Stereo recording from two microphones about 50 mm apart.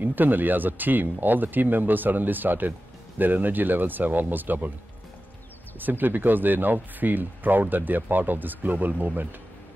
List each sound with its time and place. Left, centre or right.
0.0 s speech: right
5.8 s speech: right